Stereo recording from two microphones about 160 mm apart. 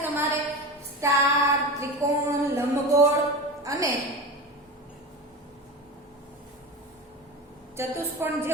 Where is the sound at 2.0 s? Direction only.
15° right (ahead or behind).